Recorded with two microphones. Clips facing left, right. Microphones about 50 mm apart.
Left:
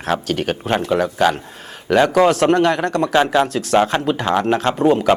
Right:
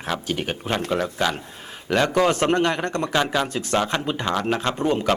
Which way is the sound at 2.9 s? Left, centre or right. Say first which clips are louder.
Left 8 dB; centre.